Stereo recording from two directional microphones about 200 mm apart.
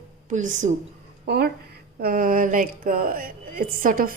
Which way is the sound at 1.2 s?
55° right (ahead or behind).